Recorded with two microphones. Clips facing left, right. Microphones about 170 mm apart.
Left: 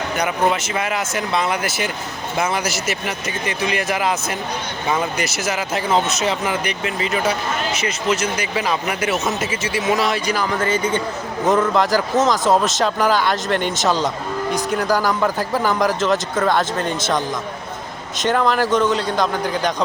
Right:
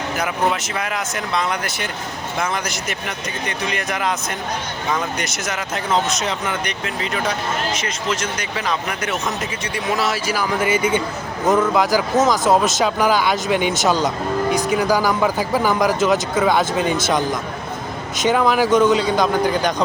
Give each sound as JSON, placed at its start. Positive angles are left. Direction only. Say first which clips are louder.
{"t": 0.2, "sound": "speech", "louder": "left 2 dB", "side_deg": 0}